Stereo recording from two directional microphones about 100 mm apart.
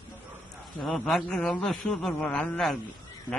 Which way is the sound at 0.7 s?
Centre (ahead or behind).